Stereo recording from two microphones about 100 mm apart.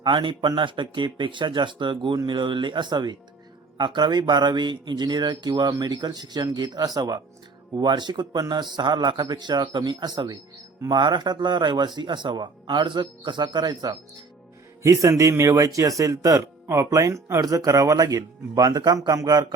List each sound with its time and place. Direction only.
0.0 s a man's voice: 55° right (ahead or behind)
15.2 s speech: 30° right (ahead or behind)